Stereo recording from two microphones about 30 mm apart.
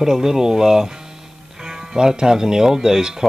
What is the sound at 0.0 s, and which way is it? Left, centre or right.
Speech, centre.